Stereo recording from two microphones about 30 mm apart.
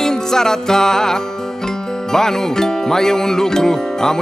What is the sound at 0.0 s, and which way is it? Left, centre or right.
Music, centre.